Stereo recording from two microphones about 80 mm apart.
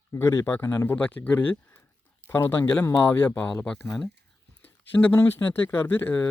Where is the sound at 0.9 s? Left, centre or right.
Centre.